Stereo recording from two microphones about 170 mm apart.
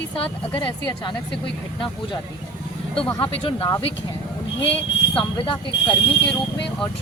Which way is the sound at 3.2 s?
30° left (ahead or behind).